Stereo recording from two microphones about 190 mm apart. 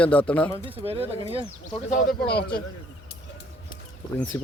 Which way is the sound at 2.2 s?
60° left (ahead or behind).